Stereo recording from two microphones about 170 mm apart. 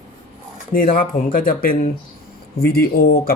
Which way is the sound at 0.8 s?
50° left (ahead or behind).